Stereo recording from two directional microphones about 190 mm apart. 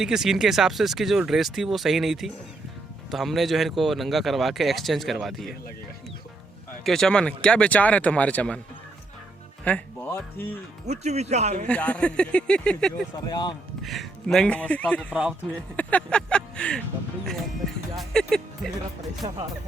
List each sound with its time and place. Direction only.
0.0 s speech: centre (ahead or behind)
6.8 s speech: 5° left (ahead or behind)
9.6 s speech: 10° left (ahead or behind)
10.8 s speech: 35° right (ahead or behind)
11.7 s speech: 5° left (ahead or behind)
13.1 s speech: 20° left (ahead or behind)
13.8 s speech: centre (ahead or behind)
15.1 s speech: 5° right (ahead or behind)
15.7 s a sound: 10° left (ahead or behind)
17.9 s speech: centre (ahead or behind)
19.2 s speech: 25° right (ahead or behind)